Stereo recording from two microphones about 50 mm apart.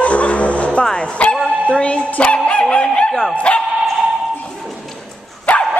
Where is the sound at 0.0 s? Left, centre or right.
Left.